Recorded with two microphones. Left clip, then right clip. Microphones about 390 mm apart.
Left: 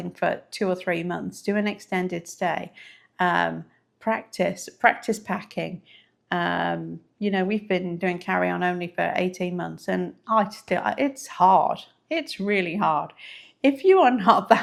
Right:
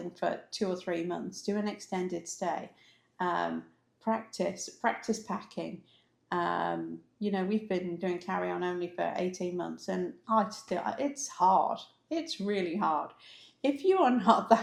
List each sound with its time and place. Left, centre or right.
0.2 s speech: left